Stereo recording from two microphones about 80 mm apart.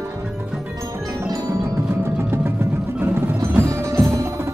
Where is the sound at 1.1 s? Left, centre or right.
Right.